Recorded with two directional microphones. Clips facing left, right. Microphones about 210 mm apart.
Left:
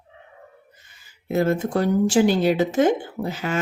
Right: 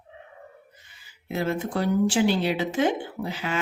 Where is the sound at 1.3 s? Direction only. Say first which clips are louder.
Left 6 dB; 45° left (ahead or behind).